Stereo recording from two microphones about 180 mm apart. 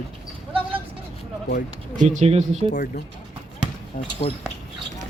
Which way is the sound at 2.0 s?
40° right (ahead or behind).